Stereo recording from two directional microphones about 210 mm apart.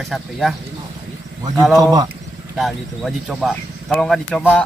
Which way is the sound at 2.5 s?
Centre (ahead or behind).